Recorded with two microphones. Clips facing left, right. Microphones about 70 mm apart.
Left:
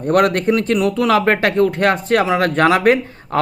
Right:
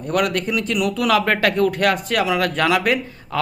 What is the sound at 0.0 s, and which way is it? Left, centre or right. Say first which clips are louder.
A man's voice: left 6 dB; left.